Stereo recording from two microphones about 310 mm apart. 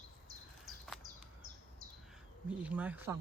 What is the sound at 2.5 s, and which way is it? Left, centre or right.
Speech, centre.